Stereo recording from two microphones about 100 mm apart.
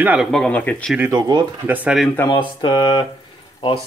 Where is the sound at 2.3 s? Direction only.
55° left (ahead or behind).